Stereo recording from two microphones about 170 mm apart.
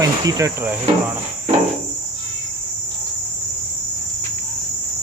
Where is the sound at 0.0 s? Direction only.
20° right (ahead or behind).